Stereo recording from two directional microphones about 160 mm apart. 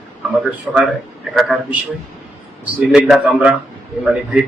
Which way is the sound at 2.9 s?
5° right (ahead or behind).